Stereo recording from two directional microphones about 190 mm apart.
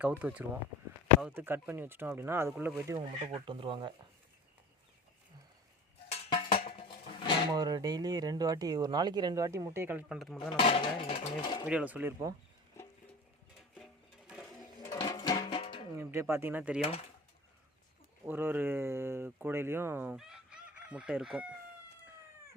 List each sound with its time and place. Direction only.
0.0 s speech: 10° right (ahead or behind); by 3.9 s 25° right (ahead or behind)
6.1 s cowbell: 30° left (ahead or behind)
6.6 s music: 30° left (ahead or behind)
7.5 s speech: 20° right (ahead or behind)
10.2 s speech: centre (ahead or behind)
10.6 s dishes: 30° left (ahead or behind)
11.7 s speech: 5° right (ahead or behind)
14.3 s a sound: 5° right (ahead or behind)
14.8 s music: 20° left (ahead or behind)
16.0 s speech: 15° right (ahead or behind)
18.3 s speech: 10° right (ahead or behind)